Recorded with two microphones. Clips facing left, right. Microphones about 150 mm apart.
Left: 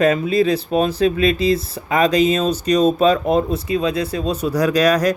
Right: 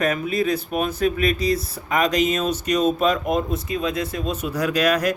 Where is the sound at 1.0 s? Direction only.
25° left (ahead or behind).